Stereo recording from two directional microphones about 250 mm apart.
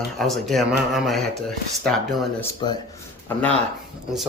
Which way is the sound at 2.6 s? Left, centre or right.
Centre.